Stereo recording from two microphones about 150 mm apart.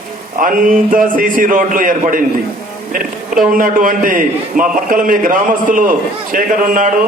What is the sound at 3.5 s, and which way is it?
A man's voice, 65° right (ahead or behind).